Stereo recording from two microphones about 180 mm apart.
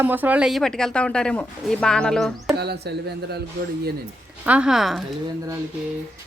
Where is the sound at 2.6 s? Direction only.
65° right (ahead or behind).